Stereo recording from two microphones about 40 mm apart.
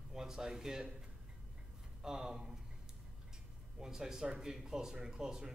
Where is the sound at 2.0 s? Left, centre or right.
Centre.